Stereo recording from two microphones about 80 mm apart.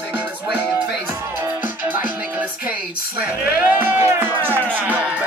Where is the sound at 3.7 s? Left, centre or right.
Right.